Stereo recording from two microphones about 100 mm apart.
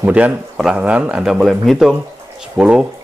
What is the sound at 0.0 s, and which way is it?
Speech, 15° right (ahead or behind).